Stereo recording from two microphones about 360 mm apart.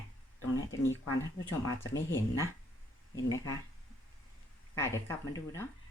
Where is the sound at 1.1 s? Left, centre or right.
Left.